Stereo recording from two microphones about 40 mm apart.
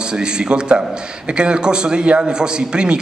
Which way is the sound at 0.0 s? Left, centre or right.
Right.